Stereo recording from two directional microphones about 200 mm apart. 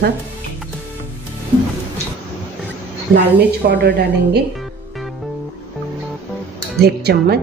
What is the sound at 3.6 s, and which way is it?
Speech, 55° right (ahead or behind).